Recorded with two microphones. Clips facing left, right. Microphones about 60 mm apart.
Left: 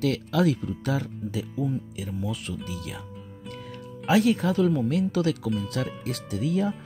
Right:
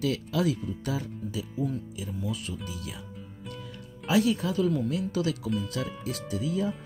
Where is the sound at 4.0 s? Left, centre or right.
Left.